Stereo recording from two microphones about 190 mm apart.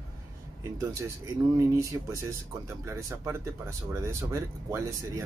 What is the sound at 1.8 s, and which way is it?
Speech, 15° right (ahead or behind).